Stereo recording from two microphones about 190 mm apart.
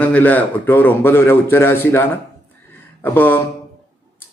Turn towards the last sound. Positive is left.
turn(degrees=10)  # may be behind; listen again after turning